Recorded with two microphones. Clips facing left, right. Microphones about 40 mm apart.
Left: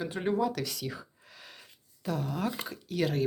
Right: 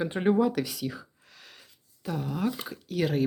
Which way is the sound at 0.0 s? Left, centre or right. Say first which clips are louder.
Right 5 dB; right.